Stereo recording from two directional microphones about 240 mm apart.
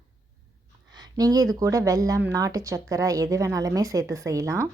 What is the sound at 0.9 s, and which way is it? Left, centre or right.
Speech, centre.